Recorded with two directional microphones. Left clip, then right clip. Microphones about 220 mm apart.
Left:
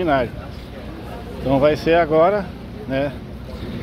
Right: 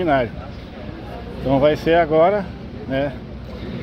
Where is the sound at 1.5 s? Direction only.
5° left (ahead or behind).